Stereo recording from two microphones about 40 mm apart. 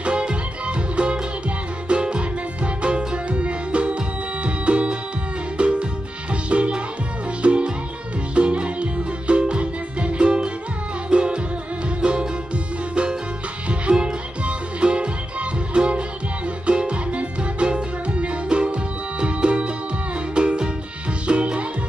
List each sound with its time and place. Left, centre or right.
0.0 s music: right
13.7 s music: right